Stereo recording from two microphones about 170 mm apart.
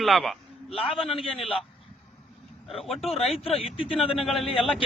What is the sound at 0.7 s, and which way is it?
Speech, 35° left (ahead or behind).